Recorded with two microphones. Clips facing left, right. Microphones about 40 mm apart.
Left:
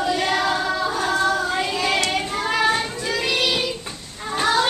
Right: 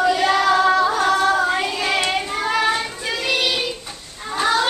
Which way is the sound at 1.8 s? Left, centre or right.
Centre.